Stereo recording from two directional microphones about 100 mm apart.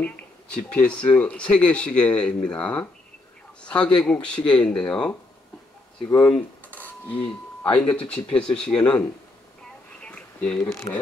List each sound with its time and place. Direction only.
0.0 s speech: 10° left (ahead or behind)
6.0 s speech: 25° left (ahead or behind)
6.3 s cutlery: 15° left (ahead or behind)
7.9 s speech: 15° left (ahead or behind)
10.0 s a sound: 10° left (ahead or behind)
10.9 s speech: 55° left (ahead or behind)